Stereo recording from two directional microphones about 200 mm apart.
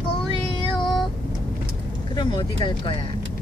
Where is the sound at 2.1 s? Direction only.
25° left (ahead or behind).